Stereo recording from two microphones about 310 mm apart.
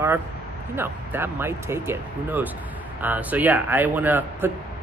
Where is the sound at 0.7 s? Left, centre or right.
Centre.